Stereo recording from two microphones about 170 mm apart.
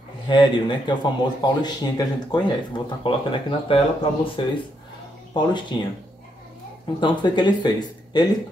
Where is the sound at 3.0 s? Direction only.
30° left (ahead or behind).